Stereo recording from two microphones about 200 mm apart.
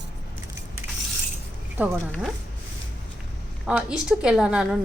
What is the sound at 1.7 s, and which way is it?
Speech, 10° right (ahead or behind).